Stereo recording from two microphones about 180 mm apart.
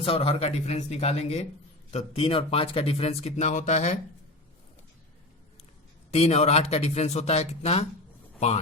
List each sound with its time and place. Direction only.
0.0 s speech: 30° left (ahead or behind)
6.1 s speech: 35° left (ahead or behind)